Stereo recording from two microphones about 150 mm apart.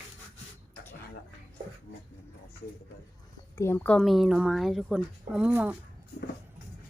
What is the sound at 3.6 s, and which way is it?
Speech, 15° left (ahead or behind).